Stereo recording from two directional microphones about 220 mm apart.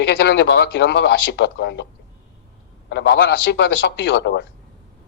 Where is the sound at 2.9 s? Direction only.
50° left (ahead or behind).